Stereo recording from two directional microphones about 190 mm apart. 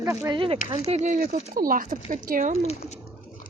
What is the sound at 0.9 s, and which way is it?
Speech, 40° right (ahead or behind).